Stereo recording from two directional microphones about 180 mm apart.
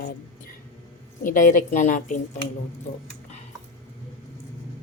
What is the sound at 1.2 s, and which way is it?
Speech, 50° left (ahead or behind).